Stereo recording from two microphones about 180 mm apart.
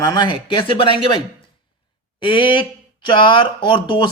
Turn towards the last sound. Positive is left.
turn(degrees=30)  # may be behind; listen again after turning